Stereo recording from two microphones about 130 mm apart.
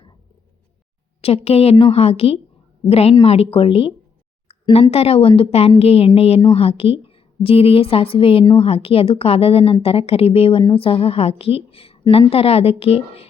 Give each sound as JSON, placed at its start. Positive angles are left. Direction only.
{"t": 1.5, "sound": "a woman's voice", "side_deg": 50}